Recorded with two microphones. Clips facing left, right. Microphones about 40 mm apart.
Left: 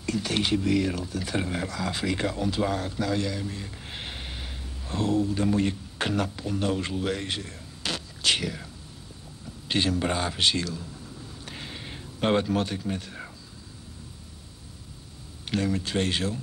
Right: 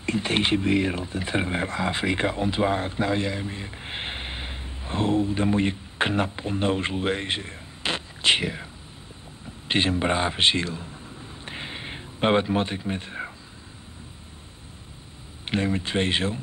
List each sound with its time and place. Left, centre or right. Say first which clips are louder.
0.0 s speech: right 3 dB; right
9.7 s a sound: right 3 dB; right
15.4 s speech: right 2 dB; right